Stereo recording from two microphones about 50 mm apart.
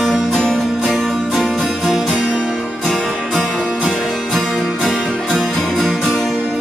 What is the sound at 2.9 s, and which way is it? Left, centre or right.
Music, centre.